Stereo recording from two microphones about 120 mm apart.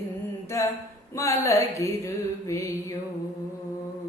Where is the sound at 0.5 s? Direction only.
25° left (ahead or behind).